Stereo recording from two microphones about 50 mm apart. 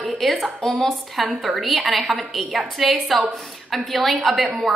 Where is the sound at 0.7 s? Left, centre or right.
Centre.